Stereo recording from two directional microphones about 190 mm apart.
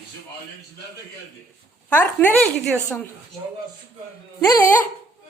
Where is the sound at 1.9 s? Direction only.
10° left (ahead or behind).